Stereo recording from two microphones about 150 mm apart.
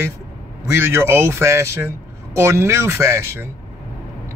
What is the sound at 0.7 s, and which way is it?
Speech, 15° right (ahead or behind).